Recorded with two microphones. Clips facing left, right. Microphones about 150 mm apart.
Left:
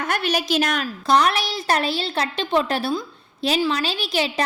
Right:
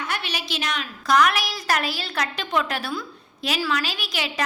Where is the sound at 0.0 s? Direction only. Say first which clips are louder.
Left 7 dB; 45° left (ahead or behind).